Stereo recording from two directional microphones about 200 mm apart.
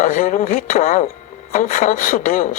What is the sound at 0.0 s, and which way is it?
Speech, 40° left (ahead or behind).